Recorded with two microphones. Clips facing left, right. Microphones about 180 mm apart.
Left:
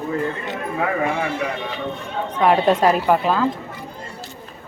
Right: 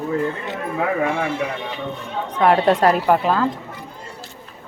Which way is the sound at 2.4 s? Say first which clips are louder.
Right 1 dB; 15° left (ahead or behind).